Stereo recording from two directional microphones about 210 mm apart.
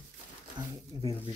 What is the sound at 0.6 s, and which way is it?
Speech, 20° right (ahead or behind).